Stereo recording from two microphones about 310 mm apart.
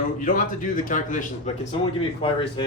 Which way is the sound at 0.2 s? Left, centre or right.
Left.